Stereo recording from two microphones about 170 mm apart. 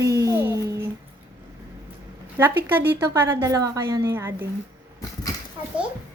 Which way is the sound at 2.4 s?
10° right (ahead or behind).